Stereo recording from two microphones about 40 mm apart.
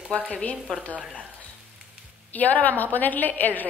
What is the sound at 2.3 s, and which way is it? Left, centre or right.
A woman's voice, left.